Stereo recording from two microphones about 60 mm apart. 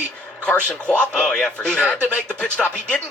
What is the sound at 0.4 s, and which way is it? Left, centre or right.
Speech, centre.